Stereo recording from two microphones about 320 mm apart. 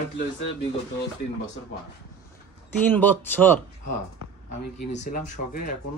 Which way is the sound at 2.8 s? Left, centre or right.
Centre.